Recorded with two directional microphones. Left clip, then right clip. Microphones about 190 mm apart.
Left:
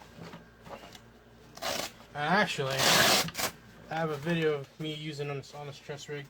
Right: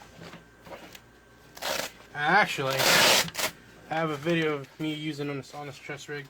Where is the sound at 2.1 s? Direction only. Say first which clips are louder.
Right 5 dB; 50° right (ahead or behind).